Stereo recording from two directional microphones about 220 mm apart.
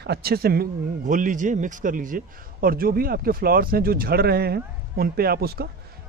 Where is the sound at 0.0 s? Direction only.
45° right (ahead or behind).